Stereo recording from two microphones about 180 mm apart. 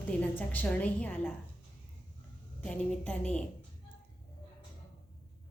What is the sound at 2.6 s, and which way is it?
Speech, 5° left (ahead or behind).